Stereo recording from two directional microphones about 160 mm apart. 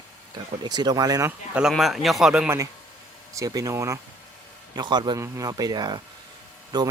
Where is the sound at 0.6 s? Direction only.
25° right (ahead or behind).